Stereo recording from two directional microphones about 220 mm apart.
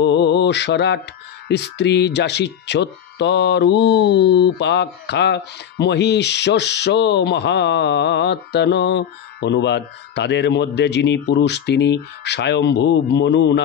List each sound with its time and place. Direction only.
0.0 s mantra: 50° left (ahead or behind)
1.5 s speech: 50° left (ahead or behind)